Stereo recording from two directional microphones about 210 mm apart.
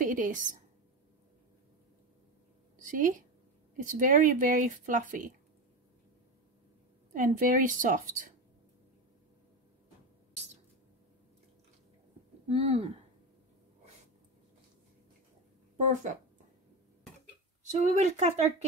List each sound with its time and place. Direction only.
0.0 s a woman's voice: 40° right (ahead or behind)
2.8 s a woman's voice: 40° right (ahead or behind)
7.1 s speech: 40° right (ahead or behind)
12.4 s speech: 30° right (ahead or behind)
15.9 s speech: 35° right (ahead or behind)
17.6 s speech: 35° right (ahead or behind)